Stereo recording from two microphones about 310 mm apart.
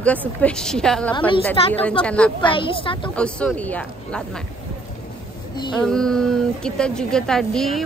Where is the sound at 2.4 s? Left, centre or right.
Centre.